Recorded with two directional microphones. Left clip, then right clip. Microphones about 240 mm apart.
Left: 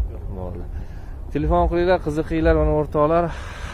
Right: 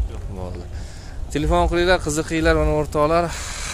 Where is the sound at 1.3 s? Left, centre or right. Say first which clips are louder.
Even; centre.